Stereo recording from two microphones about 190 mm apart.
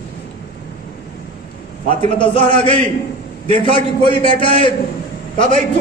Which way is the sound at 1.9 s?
25° left (ahead or behind).